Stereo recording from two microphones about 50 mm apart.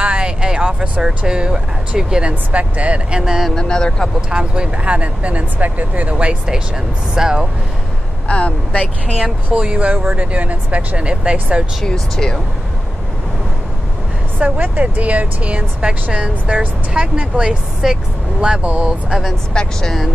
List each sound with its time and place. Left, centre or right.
0.0 s a sound: right
0.7 s speech: right
1.0 s speech: centre
3.5 s speech: centre
4.3 s speech: centre
8.3 s speech: left
9.5 s speech: right
11.8 s speech: centre
14.4 s speech: right
19.5 s speech: centre